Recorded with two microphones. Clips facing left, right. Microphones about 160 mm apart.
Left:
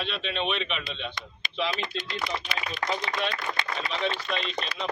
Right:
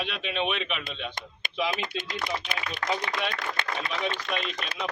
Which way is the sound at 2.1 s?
50° right (ahead or behind).